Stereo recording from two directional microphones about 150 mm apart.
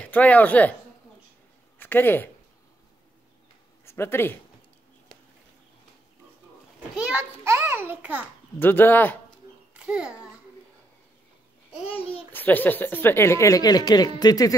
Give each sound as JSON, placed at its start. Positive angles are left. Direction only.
{"t": 0.0, "sound": "a woman's voice", "side_deg": 10}
{"t": 1.8, "sound": "speech", "side_deg": 15}
{"t": 3.8, "sound": "speech", "side_deg": 15}
{"t": 7.4, "sound": "a sound", "side_deg": -20}
{"t": 8.5, "sound": "a woman's voice", "side_deg": 15}
{"t": 9.8, "sound": "a child's voice", "side_deg": -5}
{"t": 12.3, "sound": "a woman's voice", "side_deg": 10}